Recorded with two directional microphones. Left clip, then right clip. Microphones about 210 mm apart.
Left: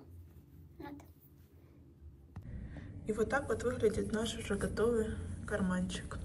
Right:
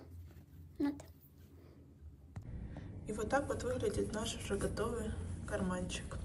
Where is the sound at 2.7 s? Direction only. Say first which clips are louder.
Left 6 dB; 5° right (ahead or behind).